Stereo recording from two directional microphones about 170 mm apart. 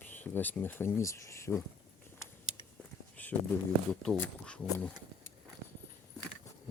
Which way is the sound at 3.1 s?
10° left (ahead or behind).